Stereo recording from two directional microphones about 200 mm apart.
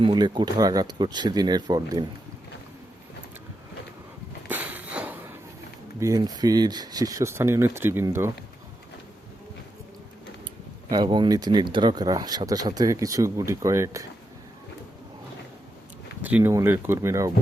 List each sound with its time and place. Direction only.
0.0 s speech: 20° right (ahead or behind)
4.4 s a sound: 10° right (ahead or behind)
6.0 s speech: 15° right (ahead or behind)
10.8 s speech: 20° right (ahead or behind)
16.2 s speech: 10° right (ahead or behind)